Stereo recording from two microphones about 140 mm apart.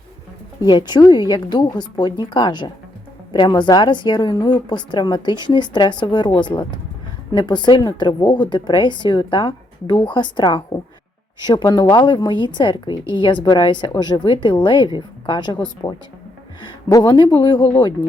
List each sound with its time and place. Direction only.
0.7 s a woman's voice: 30° left (ahead or behind)